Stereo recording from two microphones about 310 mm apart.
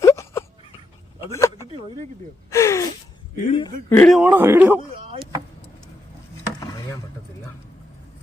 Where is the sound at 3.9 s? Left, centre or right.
Centre.